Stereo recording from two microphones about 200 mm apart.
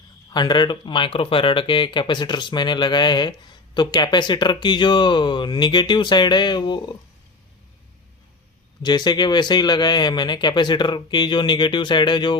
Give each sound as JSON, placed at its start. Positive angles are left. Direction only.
{"t": 0.3, "sound": "speech", "side_deg": 20}
{"t": 8.8, "sound": "speech", "side_deg": 20}